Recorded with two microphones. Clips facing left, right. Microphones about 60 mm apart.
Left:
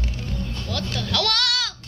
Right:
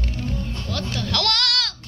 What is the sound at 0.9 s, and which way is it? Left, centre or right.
Goat, centre.